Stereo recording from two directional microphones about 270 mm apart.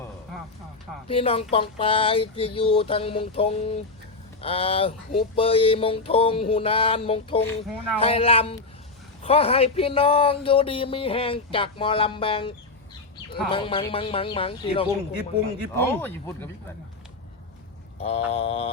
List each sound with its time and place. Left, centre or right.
1.0 s speech: left
15.7 s speech: centre
18.0 s speech: left